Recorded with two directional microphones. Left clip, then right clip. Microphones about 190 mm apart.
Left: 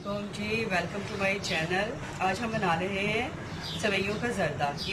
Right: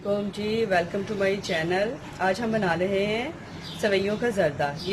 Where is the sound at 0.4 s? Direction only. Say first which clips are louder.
Right 5 dB; 40° right (ahead or behind).